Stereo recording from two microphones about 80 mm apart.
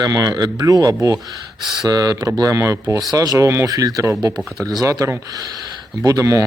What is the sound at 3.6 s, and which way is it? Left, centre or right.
Speech, right.